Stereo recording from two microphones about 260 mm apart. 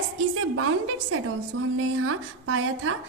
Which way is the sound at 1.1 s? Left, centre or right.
Right.